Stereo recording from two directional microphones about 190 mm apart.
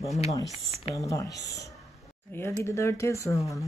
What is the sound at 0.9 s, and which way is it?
Speech, 15° left (ahead or behind).